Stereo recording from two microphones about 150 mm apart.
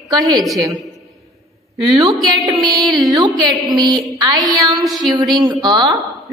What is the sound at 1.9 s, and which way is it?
A woman's voice, 30° right (ahead or behind).